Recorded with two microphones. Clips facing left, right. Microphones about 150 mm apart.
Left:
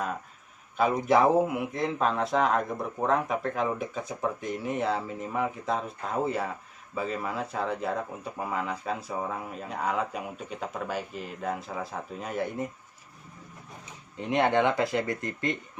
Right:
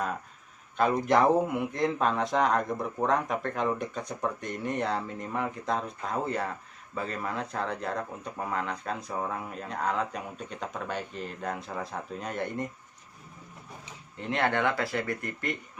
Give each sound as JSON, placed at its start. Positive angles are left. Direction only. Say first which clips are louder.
{"t": 0.8, "sound": "speech", "louder": "left 1 dB", "side_deg": 5}
{"t": 14.2, "sound": "speech", "louder": "left 4 dB", "side_deg": 20}